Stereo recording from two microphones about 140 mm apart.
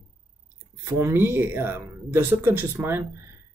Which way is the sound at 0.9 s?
15° right (ahead or behind).